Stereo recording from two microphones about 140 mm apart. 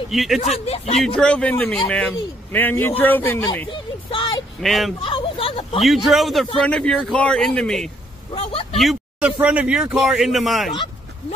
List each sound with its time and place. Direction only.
0.1 s a man's voice: centre (ahead or behind)
0.4 s speech: 50° left (ahead or behind)
1.0 s a man's voice: 5° left (ahead or behind)
3.7 s a sound: 35° left (ahead or behind)
4.6 s a man's voice: centre (ahead or behind)
5.0 s a sound: 40° left (ahead or behind)
5.8 s a man's voice: centre (ahead or behind)
8.3 s a sound: 40° left (ahead or behind)
8.7 s a man's voice: 5° right (ahead or behind)